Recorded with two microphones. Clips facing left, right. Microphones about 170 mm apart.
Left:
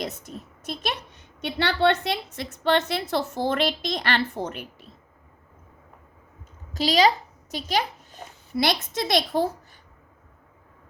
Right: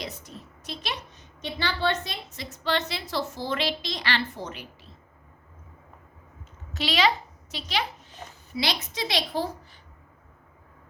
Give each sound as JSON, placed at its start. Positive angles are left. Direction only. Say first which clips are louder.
{"t": 0.0, "sound": "a woman's voice", "louder": "left 5 dB", "side_deg": 50}
{"t": 6.7, "sound": "a child's voice", "louder": "left 4 dB", "side_deg": 40}